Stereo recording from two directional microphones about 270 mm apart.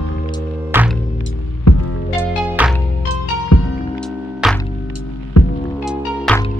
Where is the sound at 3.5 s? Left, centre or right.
Left.